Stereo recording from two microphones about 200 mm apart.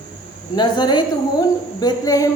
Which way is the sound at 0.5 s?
20° left (ahead or behind).